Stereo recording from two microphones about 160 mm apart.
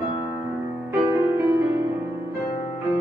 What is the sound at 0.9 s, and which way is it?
Music, 10° right (ahead or behind).